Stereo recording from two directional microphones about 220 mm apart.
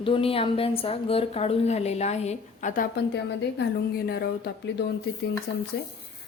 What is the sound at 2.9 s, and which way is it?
A woman's voice, 50° left (ahead or behind).